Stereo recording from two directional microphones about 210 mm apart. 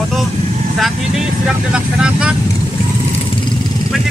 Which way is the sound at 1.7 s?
5° right (ahead or behind).